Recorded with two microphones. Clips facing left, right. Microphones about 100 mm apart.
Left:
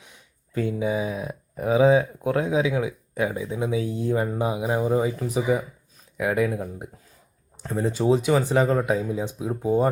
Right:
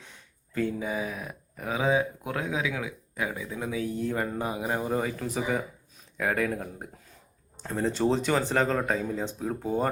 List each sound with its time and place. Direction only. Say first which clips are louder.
0.5 s speech: left 5 dB; 15° left (ahead or behind)